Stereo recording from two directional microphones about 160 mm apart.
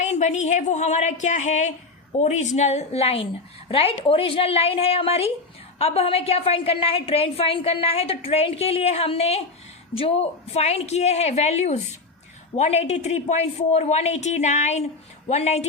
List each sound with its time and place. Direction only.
0.0 s a woman's voice: 45° left (ahead or behind)